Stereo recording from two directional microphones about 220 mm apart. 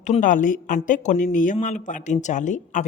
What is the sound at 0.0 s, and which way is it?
A woman's voice, 35° left (ahead or behind).